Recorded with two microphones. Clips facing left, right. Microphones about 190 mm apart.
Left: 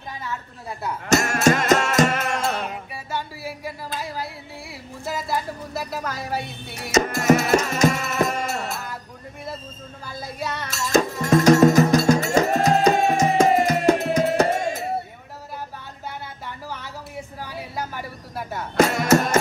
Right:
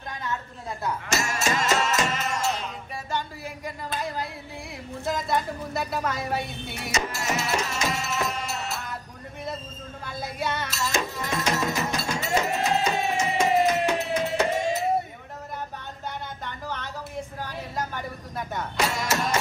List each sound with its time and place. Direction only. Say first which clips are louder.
1.0 s music: left 12 dB; 55° left (ahead or behind)
3.1 s a sound: left 2 dB; 5° left (ahead or behind)
6.9 s music: left 11 dB; 50° left (ahead or behind)
10.0 s music: even; centre (ahead or behind)
10.7 s music: left 8 dB; 45° left (ahead or behind)
16.4 s a sound: even; 10° left (ahead or behind)
18.8 s speech: left 10 dB; 50° left (ahead or behind)